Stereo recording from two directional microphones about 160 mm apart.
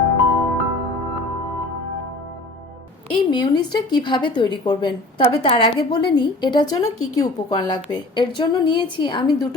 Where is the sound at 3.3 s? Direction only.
25° left (ahead or behind).